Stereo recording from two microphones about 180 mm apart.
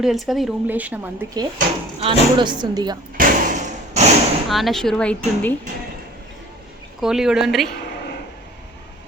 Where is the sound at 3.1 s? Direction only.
45° right (ahead or behind).